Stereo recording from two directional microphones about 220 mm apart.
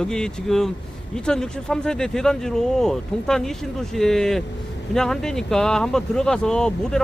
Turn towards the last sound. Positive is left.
turn(degrees=5)  # may be behind; listen again after turning